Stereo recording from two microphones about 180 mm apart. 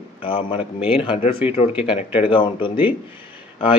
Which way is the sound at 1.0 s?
35° left (ahead or behind).